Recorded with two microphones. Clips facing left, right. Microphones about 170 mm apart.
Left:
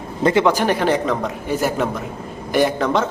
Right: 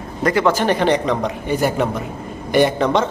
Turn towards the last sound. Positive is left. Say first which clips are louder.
# right 2 dB
turn(degrees=0)  # may be behind; listen again after turning